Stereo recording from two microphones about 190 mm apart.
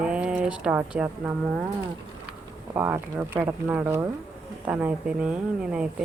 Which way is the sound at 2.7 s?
10° right (ahead or behind).